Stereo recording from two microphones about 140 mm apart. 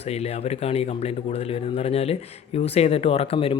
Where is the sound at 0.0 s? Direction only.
50° left (ahead or behind).